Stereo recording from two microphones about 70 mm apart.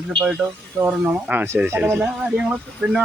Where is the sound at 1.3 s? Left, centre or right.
Right.